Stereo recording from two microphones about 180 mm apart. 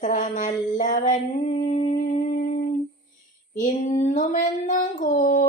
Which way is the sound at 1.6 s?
40° left (ahead or behind).